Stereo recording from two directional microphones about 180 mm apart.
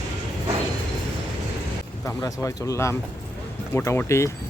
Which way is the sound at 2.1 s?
15° left (ahead or behind).